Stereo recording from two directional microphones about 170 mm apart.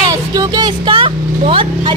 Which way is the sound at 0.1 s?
25° right (ahead or behind).